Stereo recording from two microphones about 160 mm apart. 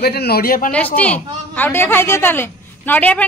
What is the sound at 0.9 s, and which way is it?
A woman's voice, 10° left (ahead or behind).